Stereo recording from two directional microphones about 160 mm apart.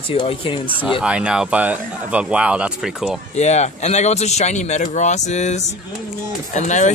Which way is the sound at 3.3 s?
45° left (ahead or behind).